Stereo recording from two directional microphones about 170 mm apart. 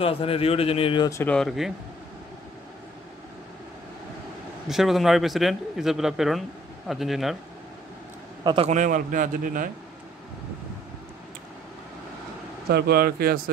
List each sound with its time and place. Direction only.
0.0 s speech: 35° left (ahead or behind)
1.2 s a man's voice: 5° left (ahead or behind)
4.6 s a man's voice: centre (ahead or behind)
8.6 s a man's voice: 45° right (ahead or behind)
12.6 s speech: 70° right (ahead or behind)